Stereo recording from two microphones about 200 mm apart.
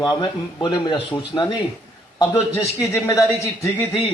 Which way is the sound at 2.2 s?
10° left (ahead or behind).